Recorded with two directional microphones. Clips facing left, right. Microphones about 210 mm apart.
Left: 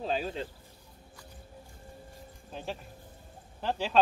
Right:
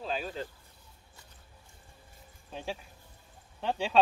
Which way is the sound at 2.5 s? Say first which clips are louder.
Even; centre (ahead or behind).